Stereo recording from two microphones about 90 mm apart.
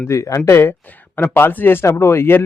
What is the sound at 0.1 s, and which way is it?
Speech, 35° left (ahead or behind).